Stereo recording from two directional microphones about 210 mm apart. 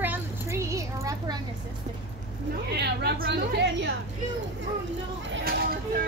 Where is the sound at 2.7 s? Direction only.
50° right (ahead or behind).